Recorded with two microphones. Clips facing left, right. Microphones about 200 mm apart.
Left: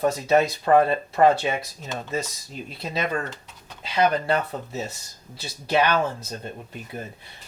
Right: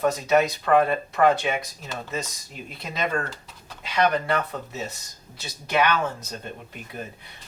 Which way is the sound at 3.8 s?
30° left (ahead or behind).